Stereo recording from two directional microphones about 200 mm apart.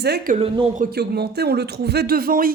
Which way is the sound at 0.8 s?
50° right (ahead or behind).